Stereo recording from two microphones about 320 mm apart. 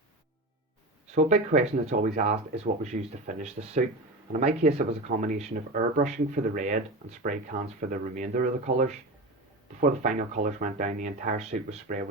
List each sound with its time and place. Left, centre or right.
1.1 s speech: right